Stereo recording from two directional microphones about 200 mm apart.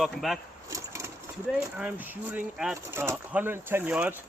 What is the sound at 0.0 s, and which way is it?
Speech, centre (ahead or behind).